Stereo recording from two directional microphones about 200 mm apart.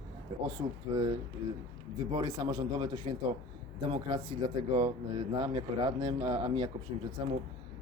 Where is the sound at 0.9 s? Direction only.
20° right (ahead or behind).